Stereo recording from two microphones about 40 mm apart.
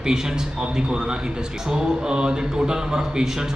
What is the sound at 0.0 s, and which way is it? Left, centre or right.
A man's voice, centre.